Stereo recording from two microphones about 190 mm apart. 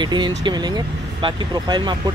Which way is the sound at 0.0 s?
25° right (ahead or behind).